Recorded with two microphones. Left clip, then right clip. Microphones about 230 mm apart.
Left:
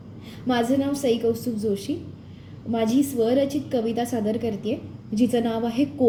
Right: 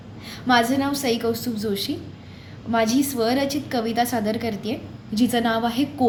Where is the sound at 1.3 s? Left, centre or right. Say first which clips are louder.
Left 1 dB; centre.